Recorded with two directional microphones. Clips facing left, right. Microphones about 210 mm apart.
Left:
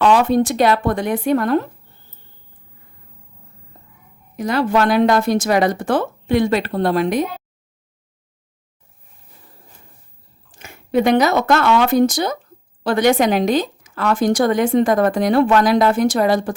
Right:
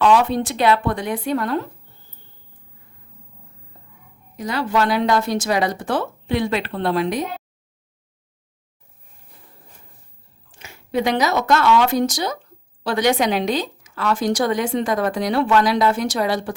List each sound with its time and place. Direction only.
0.0 s a woman's voice: 45° left (ahead or behind)
4.4 s a woman's voice: 50° left (ahead or behind)
10.5 s a woman's voice: 50° left (ahead or behind)